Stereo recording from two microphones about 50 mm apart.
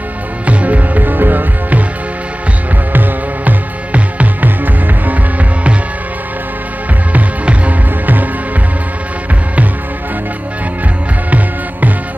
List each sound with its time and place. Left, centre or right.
0.5 s music: right
2.9 s music: right
7.1 s music: right
11.2 s music: right